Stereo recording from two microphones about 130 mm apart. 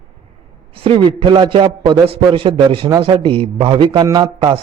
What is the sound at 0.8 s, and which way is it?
A man's voice, 40° right (ahead or behind).